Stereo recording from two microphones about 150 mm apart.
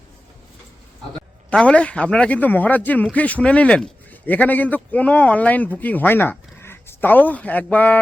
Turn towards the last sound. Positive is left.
turn(degrees=10)  # may be behind; listen again after turning